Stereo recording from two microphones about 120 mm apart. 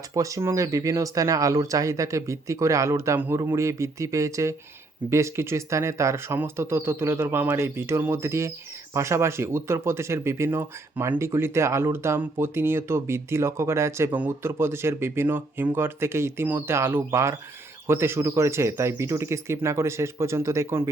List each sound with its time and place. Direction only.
0.1 s speech: 25° right (ahead or behind)